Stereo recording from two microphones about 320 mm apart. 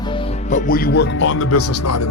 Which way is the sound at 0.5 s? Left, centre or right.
Left.